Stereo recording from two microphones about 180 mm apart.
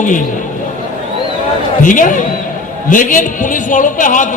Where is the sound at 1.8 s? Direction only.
45° left (ahead or behind).